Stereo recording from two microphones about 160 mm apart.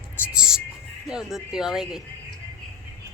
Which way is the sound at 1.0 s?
5° right (ahead or behind).